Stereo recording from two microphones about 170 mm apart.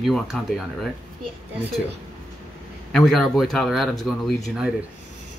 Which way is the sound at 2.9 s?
5° left (ahead or behind).